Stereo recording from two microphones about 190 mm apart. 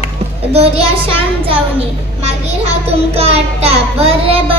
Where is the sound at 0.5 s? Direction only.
30° right (ahead or behind).